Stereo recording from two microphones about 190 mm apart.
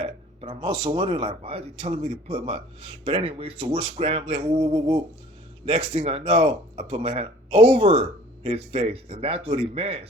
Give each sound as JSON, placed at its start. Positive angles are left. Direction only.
{"t": 0.0, "sound": "speech", "side_deg": -25}